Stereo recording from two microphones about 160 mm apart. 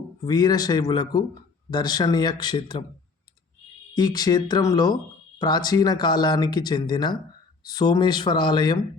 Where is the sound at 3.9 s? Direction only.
25° left (ahead or behind).